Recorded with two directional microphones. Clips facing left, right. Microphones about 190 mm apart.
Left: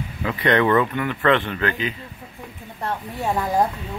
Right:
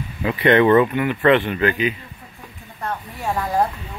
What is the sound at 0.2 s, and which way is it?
Speech, 20° right (ahead or behind).